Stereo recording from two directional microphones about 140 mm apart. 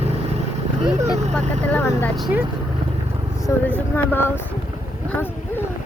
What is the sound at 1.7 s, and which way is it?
Vehicle, 10° left (ahead or behind).